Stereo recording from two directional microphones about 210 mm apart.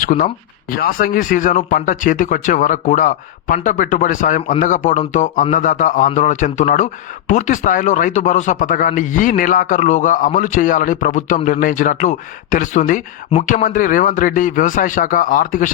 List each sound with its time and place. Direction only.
0.0 s a man's voice: 40° left (ahead or behind)